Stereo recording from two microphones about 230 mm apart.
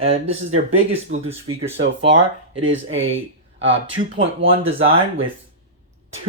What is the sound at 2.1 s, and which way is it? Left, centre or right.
Speech, right.